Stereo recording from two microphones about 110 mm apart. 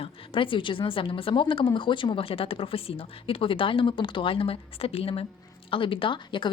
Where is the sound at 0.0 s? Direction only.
50° left (ahead or behind).